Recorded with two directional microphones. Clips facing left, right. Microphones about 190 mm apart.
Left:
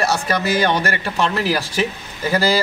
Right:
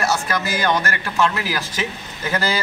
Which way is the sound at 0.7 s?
35° left (ahead or behind).